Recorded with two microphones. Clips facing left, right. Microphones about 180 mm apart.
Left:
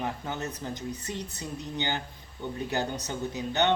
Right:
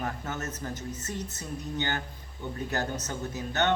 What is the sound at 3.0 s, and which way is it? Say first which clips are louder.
Speech: left 2 dB; 15° left (ahead or behind).